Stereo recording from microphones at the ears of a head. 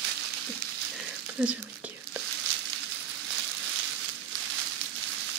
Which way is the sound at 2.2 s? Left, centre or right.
Right.